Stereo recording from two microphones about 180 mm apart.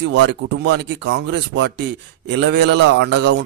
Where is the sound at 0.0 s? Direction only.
80° right.